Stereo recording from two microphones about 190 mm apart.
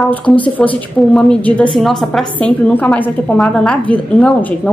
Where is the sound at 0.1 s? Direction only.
5° left (ahead or behind).